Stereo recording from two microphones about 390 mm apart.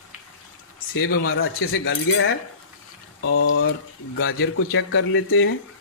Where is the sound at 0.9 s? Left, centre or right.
Left.